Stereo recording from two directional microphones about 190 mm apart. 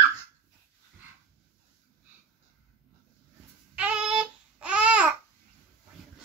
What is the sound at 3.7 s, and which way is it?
Babbling, 5° right (ahead or behind).